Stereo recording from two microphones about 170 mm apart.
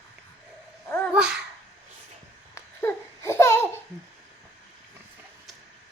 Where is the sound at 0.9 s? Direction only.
10° left (ahead or behind).